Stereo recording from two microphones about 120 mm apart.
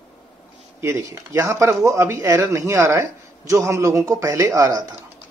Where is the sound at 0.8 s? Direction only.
25° right (ahead or behind).